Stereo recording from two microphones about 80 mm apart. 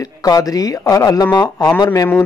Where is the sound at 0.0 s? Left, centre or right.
Left.